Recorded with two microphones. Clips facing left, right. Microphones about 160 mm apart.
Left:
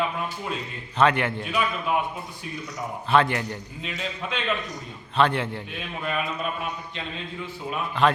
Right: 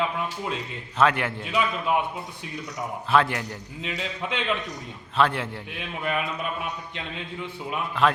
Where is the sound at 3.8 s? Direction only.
15° right (ahead or behind).